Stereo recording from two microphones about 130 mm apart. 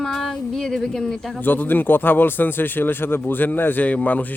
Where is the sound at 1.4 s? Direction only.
15° left (ahead or behind).